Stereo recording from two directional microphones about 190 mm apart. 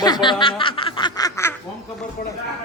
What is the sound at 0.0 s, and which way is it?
Snicker, 25° left (ahead or behind).